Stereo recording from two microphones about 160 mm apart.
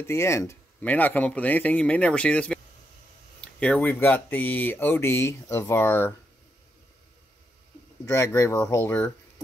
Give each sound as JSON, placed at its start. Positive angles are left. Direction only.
{"t": 0.0, "sound": "speech", "side_deg": 15}
{"t": 8.0, "sound": "speech", "side_deg": 15}